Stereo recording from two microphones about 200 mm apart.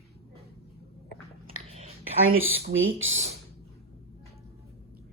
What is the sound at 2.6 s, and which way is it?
Speech, 75° right (ahead or behind).